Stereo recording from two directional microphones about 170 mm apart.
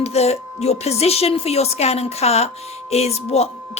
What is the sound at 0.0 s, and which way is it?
Speech, 40° left (ahead or behind).